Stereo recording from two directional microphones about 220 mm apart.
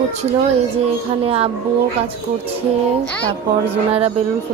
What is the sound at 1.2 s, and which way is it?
Speech, 25° right (ahead or behind).